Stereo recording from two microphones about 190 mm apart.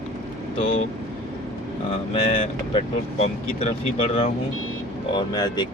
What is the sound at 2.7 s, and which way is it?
Speech, 35° left (ahead or behind).